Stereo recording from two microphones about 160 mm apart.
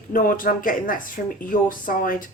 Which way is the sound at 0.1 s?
60° left (ahead or behind).